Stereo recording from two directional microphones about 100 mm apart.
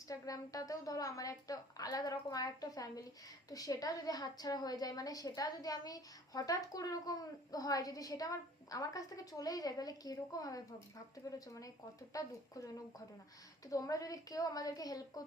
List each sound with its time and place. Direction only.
0.1 s a woman's voice: 35° left (ahead or behind)